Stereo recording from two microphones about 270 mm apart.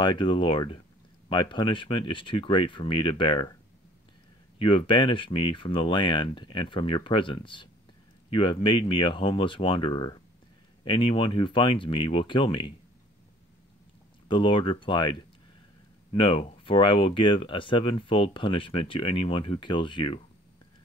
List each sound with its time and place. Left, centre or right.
0.0 s speech: centre
4.6 s speech: centre
14.2 s speech: centre